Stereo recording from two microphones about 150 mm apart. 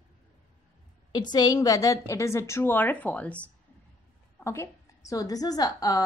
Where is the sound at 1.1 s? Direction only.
25° left (ahead or behind).